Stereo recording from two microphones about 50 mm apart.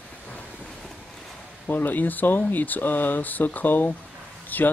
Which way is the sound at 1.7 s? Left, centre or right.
Left.